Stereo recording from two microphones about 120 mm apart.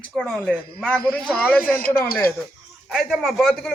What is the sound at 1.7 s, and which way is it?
Speech, 20° left (ahead or behind).